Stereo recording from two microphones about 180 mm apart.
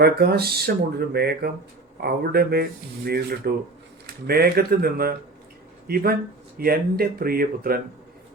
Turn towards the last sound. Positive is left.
turn(degrees=-55)  # may be behind; listen again after turning